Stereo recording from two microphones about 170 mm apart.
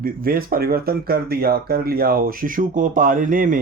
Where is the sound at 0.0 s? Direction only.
60° right (ahead or behind).